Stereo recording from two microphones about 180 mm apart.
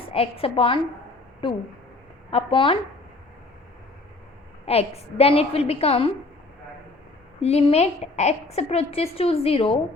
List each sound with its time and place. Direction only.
0.1 s a woman's voice: 30° left (ahead or behind)
2.3 s a woman's voice: 30° left (ahead or behind)
4.6 s a woman's voice: 35° left (ahead or behind)
7.4 s a woman's voice: 35° left (ahead or behind)